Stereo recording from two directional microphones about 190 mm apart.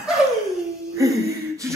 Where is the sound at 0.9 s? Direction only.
15° right (ahead or behind).